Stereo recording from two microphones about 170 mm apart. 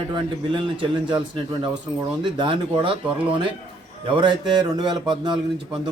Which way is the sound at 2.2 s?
30° right (ahead or behind).